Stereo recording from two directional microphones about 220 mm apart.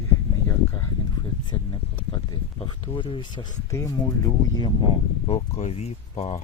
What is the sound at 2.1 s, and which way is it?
Speech, 20° left (ahead or behind).